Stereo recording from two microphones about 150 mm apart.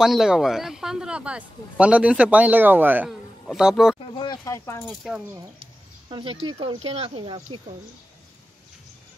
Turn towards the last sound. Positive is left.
turn(degrees=-40)  # may be behind; listen again after turning